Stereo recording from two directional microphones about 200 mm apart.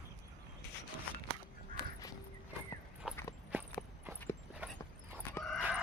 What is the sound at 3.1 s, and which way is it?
Walk, 15° left (ahead or behind).